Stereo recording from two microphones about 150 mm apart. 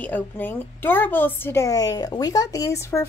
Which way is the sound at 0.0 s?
10° left (ahead or behind).